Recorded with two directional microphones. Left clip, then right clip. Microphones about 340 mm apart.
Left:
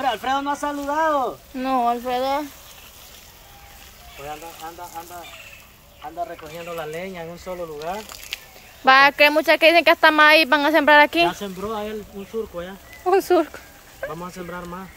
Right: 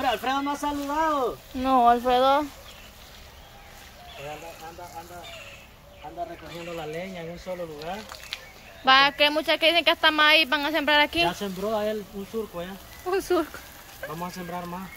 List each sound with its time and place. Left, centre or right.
0.0 s speech: centre
1.7 s speech: centre
6.9 s speech: centre
7.8 s speech: left
8.8 s speech: centre